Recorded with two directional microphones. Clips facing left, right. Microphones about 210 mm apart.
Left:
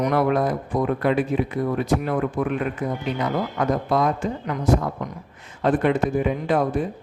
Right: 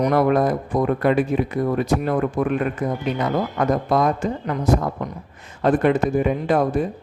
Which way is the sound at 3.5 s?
45° right (ahead or behind).